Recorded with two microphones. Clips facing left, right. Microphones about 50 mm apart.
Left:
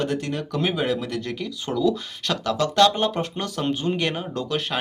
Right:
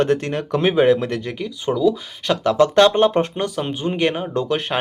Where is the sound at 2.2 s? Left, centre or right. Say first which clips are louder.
Right 8 dB; right.